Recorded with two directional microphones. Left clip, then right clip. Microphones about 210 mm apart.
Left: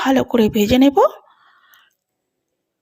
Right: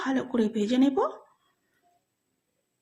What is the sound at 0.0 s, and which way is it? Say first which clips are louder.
Speech: left 12 dB; 40° left (ahead or behind).